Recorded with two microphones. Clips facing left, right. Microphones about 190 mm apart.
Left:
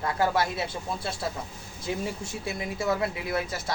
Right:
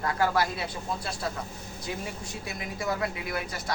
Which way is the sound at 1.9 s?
25° left (ahead or behind).